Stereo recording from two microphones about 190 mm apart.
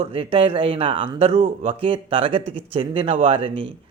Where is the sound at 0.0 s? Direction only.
30° right (ahead or behind).